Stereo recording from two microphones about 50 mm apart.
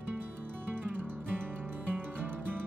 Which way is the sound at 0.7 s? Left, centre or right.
Right.